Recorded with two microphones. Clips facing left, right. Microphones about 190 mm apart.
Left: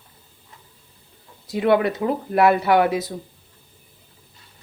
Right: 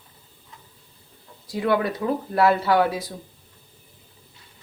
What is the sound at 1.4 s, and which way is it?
Speech, 25° left (ahead or behind).